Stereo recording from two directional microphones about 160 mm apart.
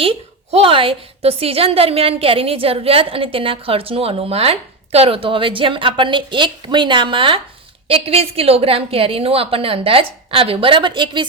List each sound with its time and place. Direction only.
0.5 s a woman's voice: 35° right (ahead or behind)